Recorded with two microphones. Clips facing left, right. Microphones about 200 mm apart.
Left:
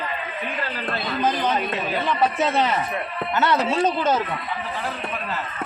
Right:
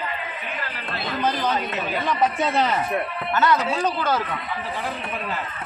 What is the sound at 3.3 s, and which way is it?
Speech, 25° left (ahead or behind).